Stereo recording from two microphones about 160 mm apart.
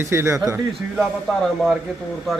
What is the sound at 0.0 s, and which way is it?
Speech, 15° right (ahead or behind).